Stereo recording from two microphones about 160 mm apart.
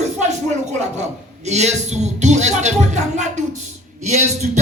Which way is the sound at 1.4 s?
45° right (ahead or behind).